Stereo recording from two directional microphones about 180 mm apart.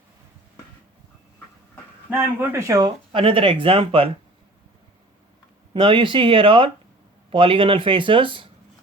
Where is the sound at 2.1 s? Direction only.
10° right (ahead or behind); by 4.1 s 30° right (ahead or behind).